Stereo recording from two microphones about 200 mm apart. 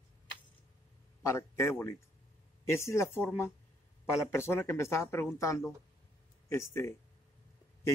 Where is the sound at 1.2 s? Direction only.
15° left (ahead or behind).